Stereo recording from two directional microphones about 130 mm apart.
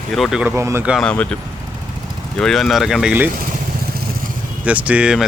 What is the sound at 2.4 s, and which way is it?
Speech, 5° left (ahead or behind).